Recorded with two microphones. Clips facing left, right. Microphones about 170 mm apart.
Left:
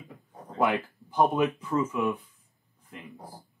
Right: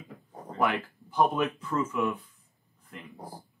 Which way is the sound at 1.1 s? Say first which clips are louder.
Left 2 dB; 15° left (ahead or behind).